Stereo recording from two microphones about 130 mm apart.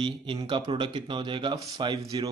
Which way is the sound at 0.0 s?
40° right (ahead or behind).